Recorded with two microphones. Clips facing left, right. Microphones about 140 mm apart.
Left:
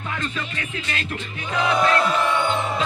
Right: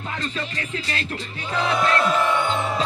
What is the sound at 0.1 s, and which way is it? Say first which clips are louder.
Speech: even; 35° right (ahead or behind).